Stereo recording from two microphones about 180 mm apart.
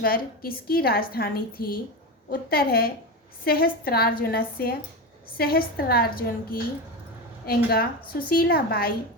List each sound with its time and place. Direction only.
0.0 s a woman's voice: 55° left (ahead or behind)